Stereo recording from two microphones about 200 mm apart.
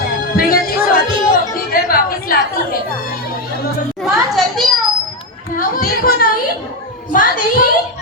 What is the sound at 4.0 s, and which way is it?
Children playing, centre (ahead or behind).